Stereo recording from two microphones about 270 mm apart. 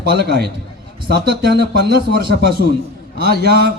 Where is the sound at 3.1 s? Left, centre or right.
Right.